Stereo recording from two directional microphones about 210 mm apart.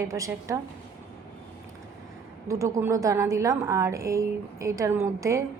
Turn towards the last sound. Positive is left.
turn(degrees=-15)  # may be behind; listen again after turning